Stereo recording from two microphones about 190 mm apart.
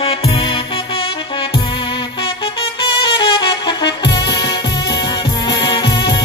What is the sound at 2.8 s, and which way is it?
Music, 25° left (ahead or behind).